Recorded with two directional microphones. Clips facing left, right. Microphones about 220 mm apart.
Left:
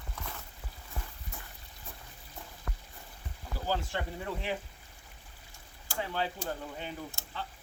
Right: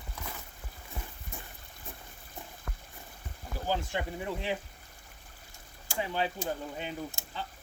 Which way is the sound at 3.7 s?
15° right (ahead or behind).